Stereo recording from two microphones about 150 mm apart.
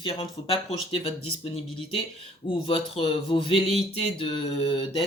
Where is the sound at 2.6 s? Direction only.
40° left (ahead or behind).